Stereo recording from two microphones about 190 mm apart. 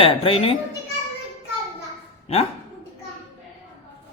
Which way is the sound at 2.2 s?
35° left (ahead or behind).